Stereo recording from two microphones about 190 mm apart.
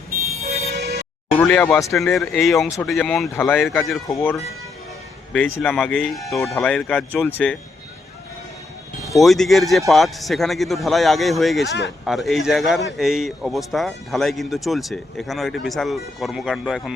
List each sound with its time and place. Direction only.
0.3 s vehicle: 35° right (ahead or behind)
1.4 s speech: 10° left (ahead or behind)
2.0 s speech: 5° left (ahead or behind)
9.0 s speech: centre (ahead or behind)
11.7 s speech: 65° left (ahead or behind)
12.0 s speech: centre (ahead or behind)